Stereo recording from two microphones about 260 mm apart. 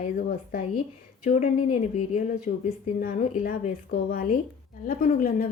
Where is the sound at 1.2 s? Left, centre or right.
Left.